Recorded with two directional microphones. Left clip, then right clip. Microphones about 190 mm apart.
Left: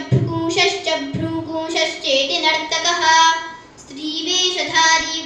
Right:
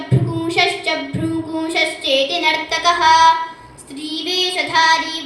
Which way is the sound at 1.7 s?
30° right (ahead or behind).